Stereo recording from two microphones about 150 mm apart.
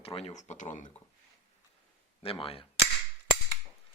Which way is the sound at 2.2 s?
40° left (ahead or behind).